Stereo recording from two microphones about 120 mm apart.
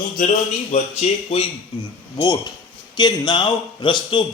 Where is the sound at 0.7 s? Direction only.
65° left (ahead or behind).